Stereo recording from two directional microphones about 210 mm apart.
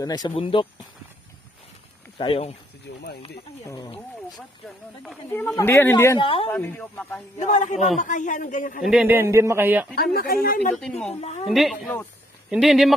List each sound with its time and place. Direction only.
0.0 s speech: 20° left (ahead or behind)
2.1 s speech: 25° left (ahead or behind)
3.6 s speech: 15° left (ahead or behind)
5.0 s speech: centre (ahead or behind)
6.1 s speech: 25° left (ahead or behind)
6.5 s speech: 10° left (ahead or behind)
7.3 s speech: 35° left (ahead or behind)
8.9 s a man's voice: 10° right (ahead or behind)
9.9 s speech: 45° left (ahead or behind)
10.8 s speech: 5° left (ahead or behind)
11.1 s speech: 30° left (ahead or behind)
11.4 s speech: centre (ahead or behind)